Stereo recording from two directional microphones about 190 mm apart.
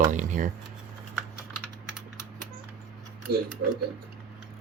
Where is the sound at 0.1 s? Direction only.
40° right (ahead or behind).